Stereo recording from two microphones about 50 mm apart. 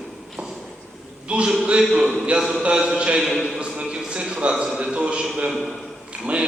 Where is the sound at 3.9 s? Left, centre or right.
Centre.